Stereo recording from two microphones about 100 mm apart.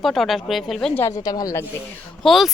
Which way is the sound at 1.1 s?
40° left (ahead or behind).